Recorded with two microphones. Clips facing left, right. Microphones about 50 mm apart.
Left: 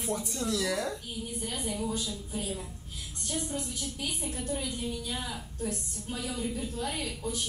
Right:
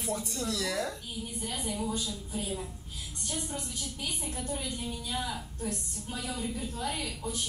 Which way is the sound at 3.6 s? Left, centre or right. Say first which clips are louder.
Left 2 dB; centre.